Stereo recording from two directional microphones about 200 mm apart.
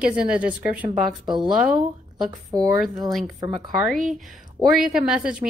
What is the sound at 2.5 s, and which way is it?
Speech, 20° right (ahead or behind).